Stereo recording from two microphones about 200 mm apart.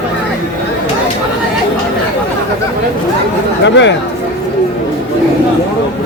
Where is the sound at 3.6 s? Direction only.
65° left (ahead or behind).